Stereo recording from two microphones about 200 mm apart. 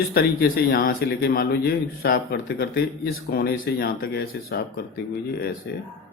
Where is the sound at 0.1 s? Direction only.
50° left (ahead or behind).